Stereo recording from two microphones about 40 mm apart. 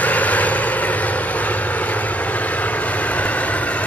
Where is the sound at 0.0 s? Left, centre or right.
Left.